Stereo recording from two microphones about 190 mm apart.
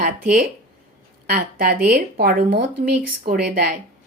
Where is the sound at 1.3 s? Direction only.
55° right (ahead or behind).